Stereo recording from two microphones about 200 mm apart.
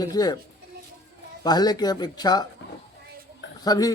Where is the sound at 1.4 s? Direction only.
20° left (ahead or behind).